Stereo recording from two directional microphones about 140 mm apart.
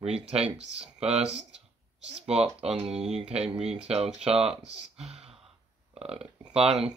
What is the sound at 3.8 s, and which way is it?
Speech, 45° right (ahead or behind).